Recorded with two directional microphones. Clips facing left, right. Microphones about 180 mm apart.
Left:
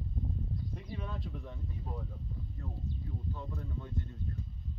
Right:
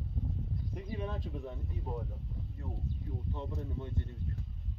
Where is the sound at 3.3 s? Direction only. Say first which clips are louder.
Right 3 dB; 25° right (ahead or behind).